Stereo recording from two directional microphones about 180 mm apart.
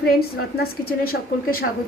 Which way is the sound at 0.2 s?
60° left (ahead or behind).